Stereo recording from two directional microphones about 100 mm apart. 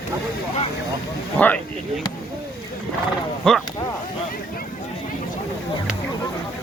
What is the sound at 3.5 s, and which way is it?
Speech, 5° left (ahead or behind).